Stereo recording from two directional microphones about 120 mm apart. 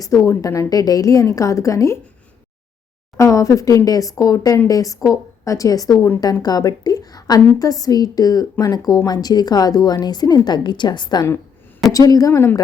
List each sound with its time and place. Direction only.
0.0 s a woman's voice: 30° left (ahead or behind)
3.2 s a woman's voice: 25° left (ahead or behind)